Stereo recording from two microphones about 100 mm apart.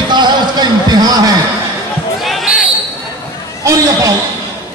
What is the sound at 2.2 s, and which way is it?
Basketball bounce, centre (ahead or behind).